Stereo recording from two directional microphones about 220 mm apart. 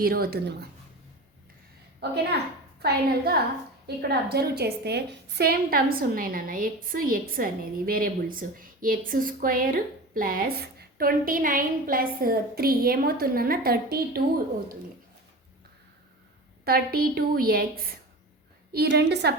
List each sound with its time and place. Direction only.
0.0 s a woman's voice: 45° right (ahead or behind)
2.0 s a woman's voice: 45° right (ahead or behind)
16.6 s a woman's voice: 45° right (ahead or behind)